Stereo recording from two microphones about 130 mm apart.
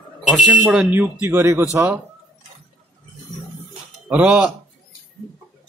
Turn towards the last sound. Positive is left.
turn(degrees=-5)  # may be behind; listen again after turning